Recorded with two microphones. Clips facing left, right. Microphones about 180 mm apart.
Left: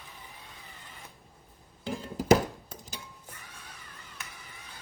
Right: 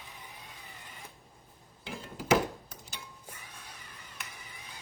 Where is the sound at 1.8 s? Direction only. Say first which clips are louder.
Left 8 dB; 40° left (ahead or behind).